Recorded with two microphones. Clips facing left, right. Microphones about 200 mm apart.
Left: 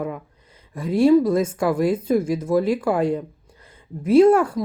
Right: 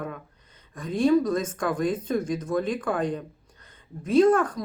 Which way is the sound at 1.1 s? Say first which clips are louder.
Left 5 dB; 25° left (ahead or behind).